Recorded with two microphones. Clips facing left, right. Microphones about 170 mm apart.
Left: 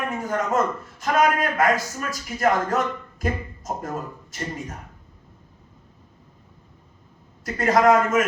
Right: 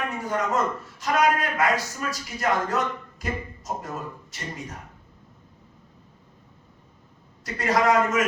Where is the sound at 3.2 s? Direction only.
50° left (ahead or behind).